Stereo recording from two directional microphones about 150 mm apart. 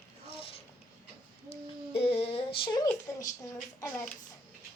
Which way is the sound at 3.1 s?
20° left (ahead or behind).